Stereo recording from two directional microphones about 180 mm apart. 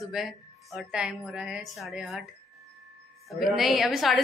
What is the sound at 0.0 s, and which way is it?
A woman's voice, centre (ahead or behind).